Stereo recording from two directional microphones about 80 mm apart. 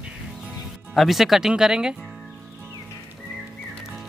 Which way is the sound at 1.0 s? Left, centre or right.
Centre.